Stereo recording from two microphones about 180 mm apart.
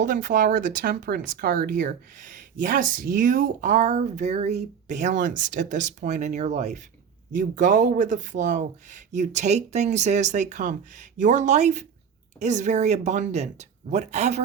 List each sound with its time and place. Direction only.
0.0 s speech: 45° right (ahead or behind)